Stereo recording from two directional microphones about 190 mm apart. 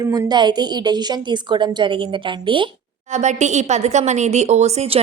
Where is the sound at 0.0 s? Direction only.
20° right (ahead or behind).